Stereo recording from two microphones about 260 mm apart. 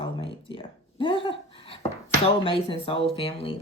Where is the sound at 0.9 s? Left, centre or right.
Centre.